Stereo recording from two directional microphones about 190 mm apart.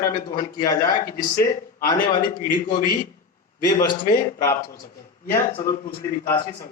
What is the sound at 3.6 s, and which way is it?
Speech, 20° left (ahead or behind).